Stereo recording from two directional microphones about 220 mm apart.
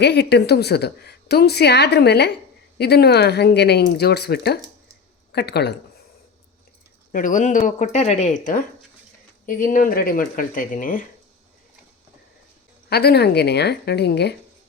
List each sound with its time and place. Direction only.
0.0 s a woman's voice: 50° left (ahead or behind)
7.1 s speech: 35° left (ahead or behind)
12.9 s a woman's voice: 45° left (ahead or behind)